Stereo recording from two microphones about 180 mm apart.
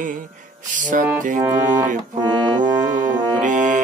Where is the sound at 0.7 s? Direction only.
45° right (ahead or behind).